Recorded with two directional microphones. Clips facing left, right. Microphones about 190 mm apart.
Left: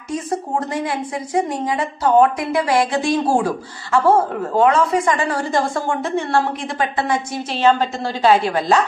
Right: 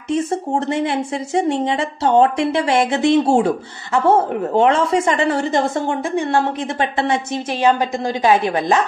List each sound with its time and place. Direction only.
0.1 s a woman's voice: 25° right (ahead or behind)
7.5 s a woman's voice: 15° right (ahead or behind)